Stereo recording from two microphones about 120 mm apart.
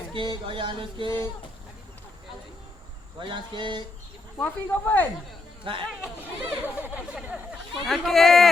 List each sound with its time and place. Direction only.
0.1 s music: 45° right (ahead or behind)
3.2 s speech: 40° right (ahead or behind)
4.4 s speech: 15° left (ahead or behind)
5.7 s music: 45° right (ahead or behind)
6.4 s speech: 15° right (ahead or behind)
7.7 s speech: centre (ahead or behind)